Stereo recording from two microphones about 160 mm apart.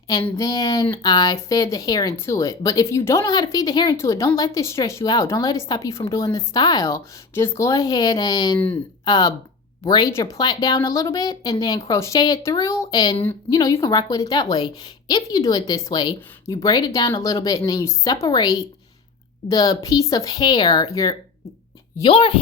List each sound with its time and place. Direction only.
0.1 s a woman's voice: 20° left (ahead or behind)
8.5 s speech: 10° left (ahead or behind)
9.0 s a woman's voice: 25° left (ahead or behind)
22.0 s speech: 30° left (ahead or behind)